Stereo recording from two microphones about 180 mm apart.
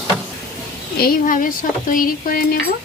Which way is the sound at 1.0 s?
50° left (ahead or behind).